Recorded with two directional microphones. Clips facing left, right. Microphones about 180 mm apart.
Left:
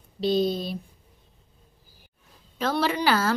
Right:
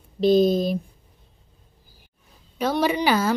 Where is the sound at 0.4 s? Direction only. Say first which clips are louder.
Right 6 dB; 45° right (ahead or behind).